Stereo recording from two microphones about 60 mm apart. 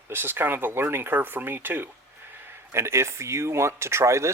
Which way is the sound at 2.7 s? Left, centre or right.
Right.